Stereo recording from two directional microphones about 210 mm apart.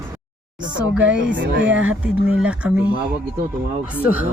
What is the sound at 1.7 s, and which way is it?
Speech, 5° right (ahead or behind).